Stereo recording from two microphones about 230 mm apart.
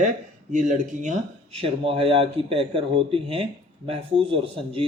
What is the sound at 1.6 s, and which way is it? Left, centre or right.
Speech, right.